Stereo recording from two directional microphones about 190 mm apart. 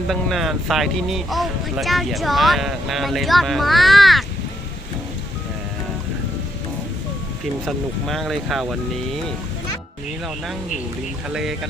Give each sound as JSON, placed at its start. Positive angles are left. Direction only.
{"t": 0.1, "sound": "speech", "side_deg": 0}
{"t": 7.6, "sound": "speech", "side_deg": 0}
{"t": 11.3, "sound": "speech", "side_deg": -5}